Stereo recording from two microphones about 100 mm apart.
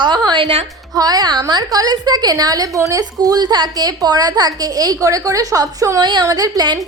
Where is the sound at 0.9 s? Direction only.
40° right (ahead or behind).